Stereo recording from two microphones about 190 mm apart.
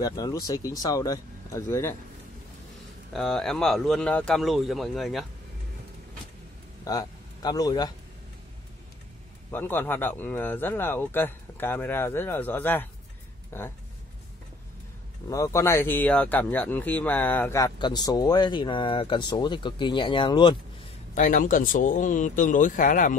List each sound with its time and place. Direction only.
0.0 s speech: 20° left (ahead or behind)
3.1 s speech: centre (ahead or behind)
6.8 s a man's voice: 20° left (ahead or behind)
9.5 s speech: 10° left (ahead or behind)
15.2 s speech: 15° left (ahead or behind)
21.1 s speech: 45° left (ahead or behind)